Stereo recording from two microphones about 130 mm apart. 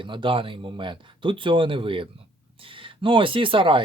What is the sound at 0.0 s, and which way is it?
Speech, 40° right (ahead or behind).